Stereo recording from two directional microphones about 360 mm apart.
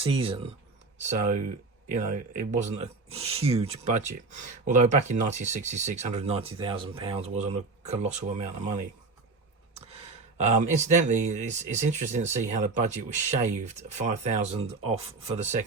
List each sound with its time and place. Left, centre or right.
0.0 s speech: centre
10.3 s speech: centre